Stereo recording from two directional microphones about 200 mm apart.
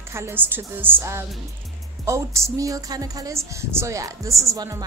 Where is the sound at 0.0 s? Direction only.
15° right (ahead or behind).